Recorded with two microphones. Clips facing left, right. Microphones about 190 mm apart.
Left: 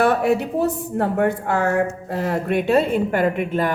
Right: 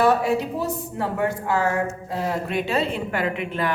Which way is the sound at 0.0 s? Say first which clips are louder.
Left 2 dB; 60° left (ahead or behind).